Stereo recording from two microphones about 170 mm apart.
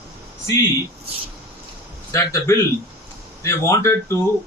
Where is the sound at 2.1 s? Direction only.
15° left (ahead or behind).